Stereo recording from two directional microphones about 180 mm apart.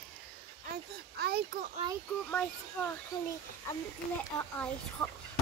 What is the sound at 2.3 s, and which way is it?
Speech, 10° left (ahead or behind).